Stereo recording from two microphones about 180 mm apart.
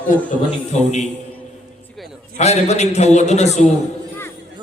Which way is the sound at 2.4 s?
40° left (ahead or behind).